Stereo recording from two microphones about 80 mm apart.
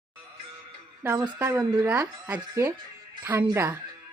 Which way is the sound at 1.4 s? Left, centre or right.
Right.